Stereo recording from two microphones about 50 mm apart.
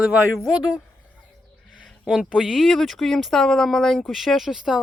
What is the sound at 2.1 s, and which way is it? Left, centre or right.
Speech, centre.